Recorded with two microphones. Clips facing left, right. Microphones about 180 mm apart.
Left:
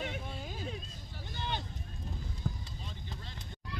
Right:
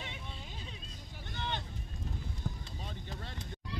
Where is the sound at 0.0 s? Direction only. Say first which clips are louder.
Left 7 dB; 50° left (ahead or behind).